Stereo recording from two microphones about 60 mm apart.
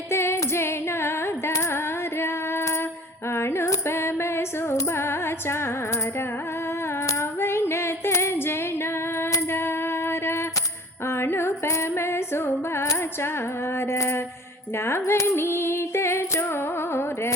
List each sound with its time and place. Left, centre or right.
0.1 s female singing: left
7.1 s female singing: left
9.5 s music: left
11.0 s female singing: left
13.7 s a sound: left
14.8 s music: left